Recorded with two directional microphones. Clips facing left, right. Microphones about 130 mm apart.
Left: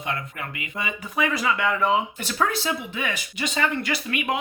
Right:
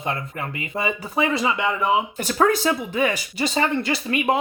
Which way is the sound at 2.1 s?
45° right (ahead or behind).